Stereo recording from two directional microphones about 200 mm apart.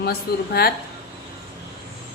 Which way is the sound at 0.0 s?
50° left (ahead or behind).